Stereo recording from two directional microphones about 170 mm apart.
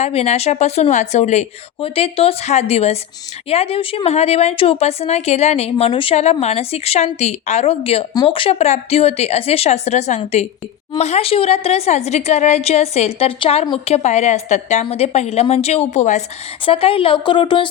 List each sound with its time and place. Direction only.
0.0 s speech: 40° left (ahead or behind)